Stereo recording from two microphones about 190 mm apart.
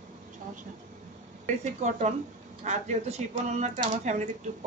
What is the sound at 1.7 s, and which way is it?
Speech, 40° right (ahead or behind).